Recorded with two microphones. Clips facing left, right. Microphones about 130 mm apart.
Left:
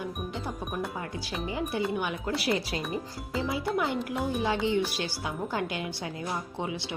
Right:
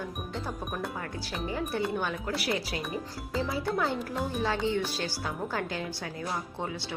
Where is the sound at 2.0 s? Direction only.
20° left (ahead or behind).